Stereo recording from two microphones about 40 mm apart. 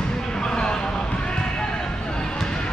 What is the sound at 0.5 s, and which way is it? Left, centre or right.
Vehicle, left.